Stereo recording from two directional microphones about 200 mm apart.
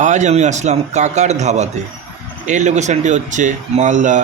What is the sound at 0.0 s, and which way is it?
Speech, 35° right (ahead or behind).